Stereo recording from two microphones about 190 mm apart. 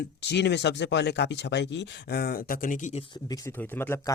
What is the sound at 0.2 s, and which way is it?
Speech, 65° left (ahead or behind).